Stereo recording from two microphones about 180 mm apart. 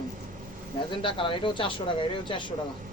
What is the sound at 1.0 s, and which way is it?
A man's voice, 30° left (ahead or behind).